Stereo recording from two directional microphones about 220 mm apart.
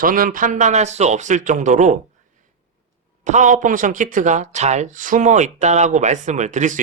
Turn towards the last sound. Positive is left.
turn(degrees=-35)  # may be behind; listen again after turning